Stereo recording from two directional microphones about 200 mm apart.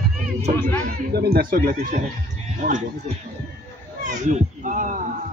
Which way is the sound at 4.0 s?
40° right (ahead or behind).